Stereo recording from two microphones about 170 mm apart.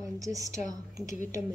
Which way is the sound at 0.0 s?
20° right (ahead or behind).